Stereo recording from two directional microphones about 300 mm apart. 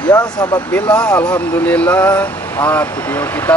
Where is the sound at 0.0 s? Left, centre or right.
Centre.